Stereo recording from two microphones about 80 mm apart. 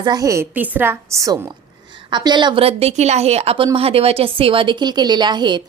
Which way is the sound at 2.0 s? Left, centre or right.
Right.